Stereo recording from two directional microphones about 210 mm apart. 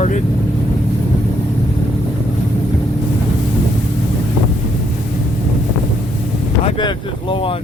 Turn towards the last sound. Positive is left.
turn(degrees=25)  # may be behind; listen again after turning